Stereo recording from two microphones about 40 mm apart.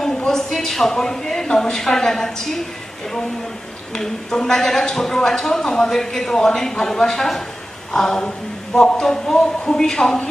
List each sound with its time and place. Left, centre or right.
0.6 s speech: centre
3.9 s speech: centre